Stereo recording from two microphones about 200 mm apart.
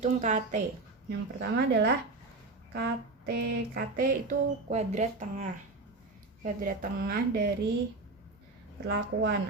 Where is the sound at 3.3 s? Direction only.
45° right (ahead or behind).